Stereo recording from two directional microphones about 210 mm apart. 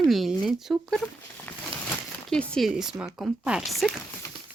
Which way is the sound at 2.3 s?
5° left (ahead or behind).